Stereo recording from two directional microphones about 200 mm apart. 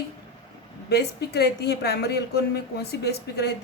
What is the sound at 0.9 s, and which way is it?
A woman's voice, 55° left (ahead or behind).